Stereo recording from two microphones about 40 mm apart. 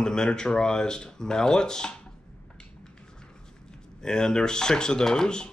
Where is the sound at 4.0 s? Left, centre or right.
Centre.